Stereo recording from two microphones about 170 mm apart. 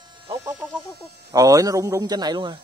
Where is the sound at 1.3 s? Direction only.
20° right (ahead or behind).